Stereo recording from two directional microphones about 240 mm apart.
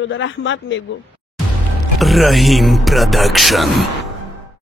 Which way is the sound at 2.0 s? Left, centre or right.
Centre.